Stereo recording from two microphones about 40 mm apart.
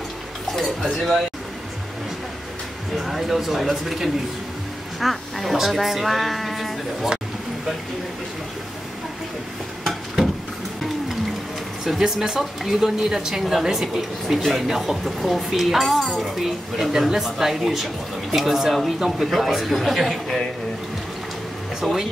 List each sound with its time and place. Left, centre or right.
0.9 s a woman's voice: centre
3.0 s a woman's voice: centre
9.8 s a sound: centre
12.0 s speech: centre
12.4 s a woman's voice: centre
21.8 s speech: centre